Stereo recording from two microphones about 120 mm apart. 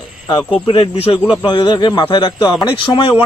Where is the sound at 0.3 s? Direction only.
40° left (ahead or behind).